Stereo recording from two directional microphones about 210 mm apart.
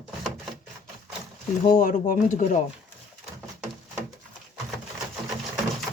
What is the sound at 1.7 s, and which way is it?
Speech, 40° left (ahead or behind).